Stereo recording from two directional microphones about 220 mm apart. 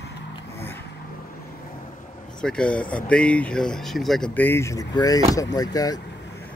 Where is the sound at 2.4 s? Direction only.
5° left (ahead or behind).